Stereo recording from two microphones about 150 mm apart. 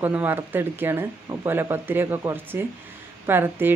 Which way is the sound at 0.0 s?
15° right (ahead or behind).